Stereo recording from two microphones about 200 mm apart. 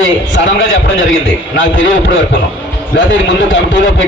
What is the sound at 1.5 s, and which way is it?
Speech, 70° left (ahead or behind).